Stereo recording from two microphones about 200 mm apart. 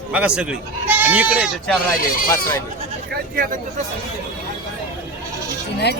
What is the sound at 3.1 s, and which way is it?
Speech, 50° right (ahead or behind).